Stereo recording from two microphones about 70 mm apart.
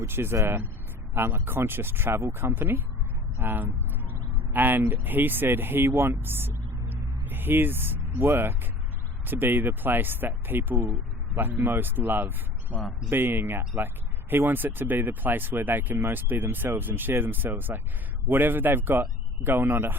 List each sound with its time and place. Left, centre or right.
0.1 s speech: right